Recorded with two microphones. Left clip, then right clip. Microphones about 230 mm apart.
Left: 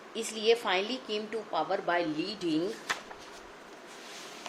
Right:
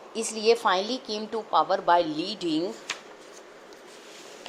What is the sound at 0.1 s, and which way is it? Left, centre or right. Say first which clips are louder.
A woman's voice: right 4 dB; centre.